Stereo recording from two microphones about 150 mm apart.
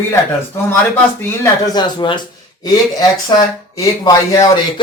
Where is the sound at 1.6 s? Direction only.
30° left (ahead or behind).